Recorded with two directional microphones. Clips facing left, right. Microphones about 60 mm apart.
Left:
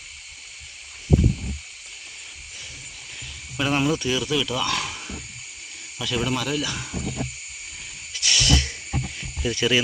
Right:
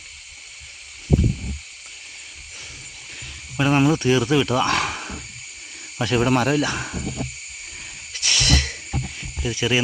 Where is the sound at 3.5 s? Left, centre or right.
Right.